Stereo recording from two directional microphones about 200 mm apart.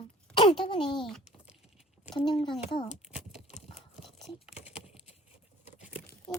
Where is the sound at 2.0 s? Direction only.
20° left (ahead or behind).